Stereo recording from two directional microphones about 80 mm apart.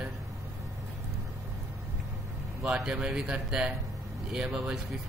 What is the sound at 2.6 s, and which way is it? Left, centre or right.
Speech, centre.